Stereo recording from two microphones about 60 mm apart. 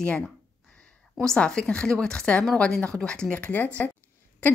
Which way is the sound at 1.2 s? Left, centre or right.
Centre.